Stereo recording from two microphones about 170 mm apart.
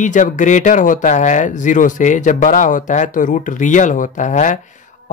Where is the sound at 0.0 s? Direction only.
50° left (ahead or behind).